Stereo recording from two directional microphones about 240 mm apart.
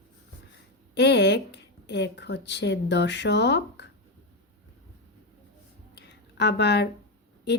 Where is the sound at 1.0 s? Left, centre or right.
Left.